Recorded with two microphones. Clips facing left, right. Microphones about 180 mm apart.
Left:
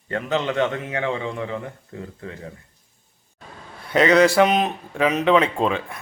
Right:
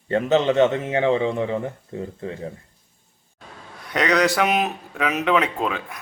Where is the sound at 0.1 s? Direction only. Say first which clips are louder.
Right 5 dB; 25° right (ahead or behind).